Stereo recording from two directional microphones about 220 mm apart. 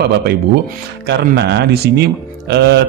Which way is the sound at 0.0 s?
50° right (ahead or behind).